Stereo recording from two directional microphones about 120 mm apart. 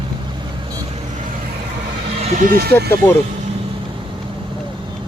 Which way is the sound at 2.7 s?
20° left (ahead or behind).